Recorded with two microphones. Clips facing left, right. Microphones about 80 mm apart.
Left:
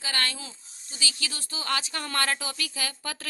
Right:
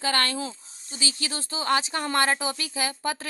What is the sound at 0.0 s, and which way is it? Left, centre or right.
Speech, right.